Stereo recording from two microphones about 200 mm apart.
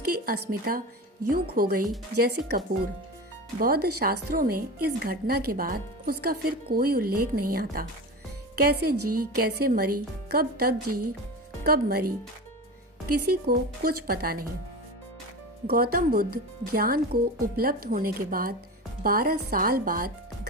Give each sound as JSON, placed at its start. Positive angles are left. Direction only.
{"t": 0.1, "sound": "a woman's voice", "side_deg": -45}
{"t": 13.3, "sound": "a woman's voice", "side_deg": -50}
{"t": 15.6, "sound": "a woman's voice", "side_deg": -50}